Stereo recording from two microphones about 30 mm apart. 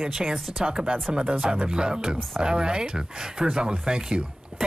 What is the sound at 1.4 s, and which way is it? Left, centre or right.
Speech, right.